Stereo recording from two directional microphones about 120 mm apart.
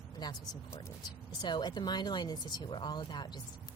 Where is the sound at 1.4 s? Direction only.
35° left (ahead or behind).